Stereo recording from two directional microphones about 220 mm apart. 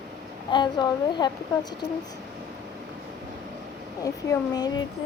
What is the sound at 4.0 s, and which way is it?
Speech, 15° left (ahead or behind).